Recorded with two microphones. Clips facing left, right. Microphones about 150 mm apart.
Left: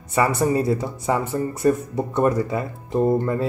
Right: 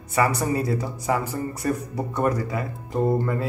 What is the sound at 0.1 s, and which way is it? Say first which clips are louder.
Speech: left 3 dB; 25° left (ahead or behind).